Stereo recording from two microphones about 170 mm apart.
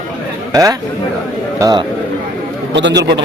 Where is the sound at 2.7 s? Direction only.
90° right.